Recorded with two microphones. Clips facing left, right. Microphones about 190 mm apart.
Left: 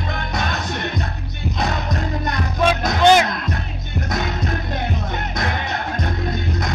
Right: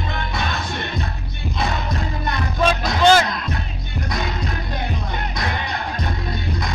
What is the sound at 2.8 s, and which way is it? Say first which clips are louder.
Music: left 1 dB; 15° left (ahead or behind).